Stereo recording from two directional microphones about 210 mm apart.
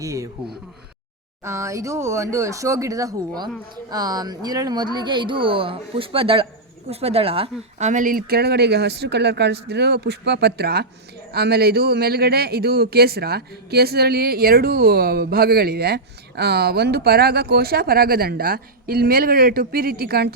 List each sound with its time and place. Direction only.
0.0 s a man's voice: 15° right (ahead or behind); by 20.3 s 50° right (ahead or behind)